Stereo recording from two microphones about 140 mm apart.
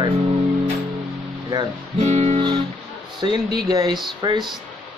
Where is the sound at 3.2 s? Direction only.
30° right (ahead or behind).